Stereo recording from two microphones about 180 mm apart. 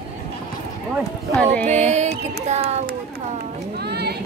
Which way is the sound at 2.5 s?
35° right (ahead or behind).